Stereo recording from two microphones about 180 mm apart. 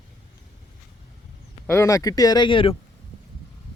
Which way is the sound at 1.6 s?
15° left (ahead or behind).